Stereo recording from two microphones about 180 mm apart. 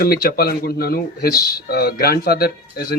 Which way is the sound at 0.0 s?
55° left (ahead or behind).